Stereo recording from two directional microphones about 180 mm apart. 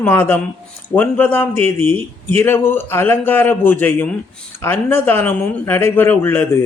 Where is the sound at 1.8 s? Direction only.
35° right (ahead or behind).